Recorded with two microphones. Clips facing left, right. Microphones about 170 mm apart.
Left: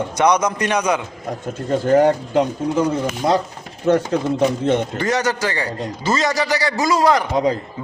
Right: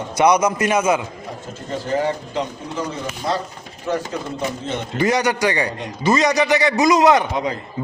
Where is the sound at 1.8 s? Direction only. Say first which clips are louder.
Left 7 dB; 50° left (ahead or behind).